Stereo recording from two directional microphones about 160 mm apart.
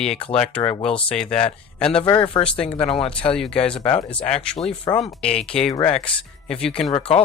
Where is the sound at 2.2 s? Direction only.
35° left (ahead or behind).